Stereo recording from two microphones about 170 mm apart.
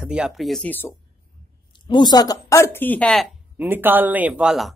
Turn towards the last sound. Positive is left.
turn(degrees=-5)  # may be behind; listen again after turning